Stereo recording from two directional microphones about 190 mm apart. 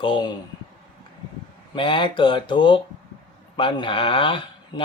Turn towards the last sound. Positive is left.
turn(degrees=25)  # may be behind; listen again after turning